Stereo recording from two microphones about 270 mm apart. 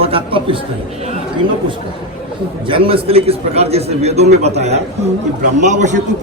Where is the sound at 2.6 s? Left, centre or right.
Centre.